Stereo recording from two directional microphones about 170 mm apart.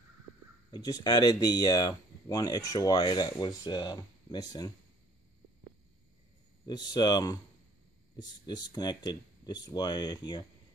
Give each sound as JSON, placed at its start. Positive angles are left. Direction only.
{"t": 0.7, "sound": "speech", "side_deg": 25}
{"t": 6.6, "sound": "speech", "side_deg": 25}